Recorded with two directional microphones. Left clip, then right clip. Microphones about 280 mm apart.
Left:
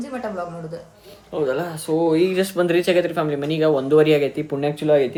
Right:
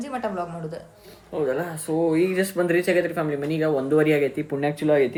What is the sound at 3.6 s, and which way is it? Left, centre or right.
Speech, centre.